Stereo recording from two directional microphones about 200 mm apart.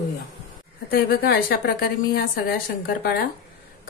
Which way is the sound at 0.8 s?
50° left (ahead or behind).